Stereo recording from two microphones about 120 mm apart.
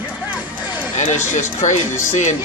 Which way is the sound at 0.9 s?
85° left.